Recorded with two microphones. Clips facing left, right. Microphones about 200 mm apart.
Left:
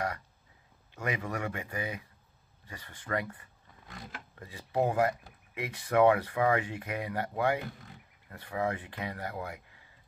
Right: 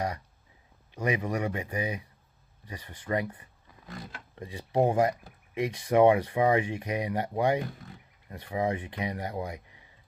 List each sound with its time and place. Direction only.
0.9 s speech: 20° right (ahead or behind)